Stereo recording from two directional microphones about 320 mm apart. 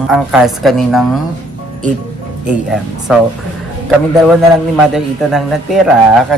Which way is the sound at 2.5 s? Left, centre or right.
Centre.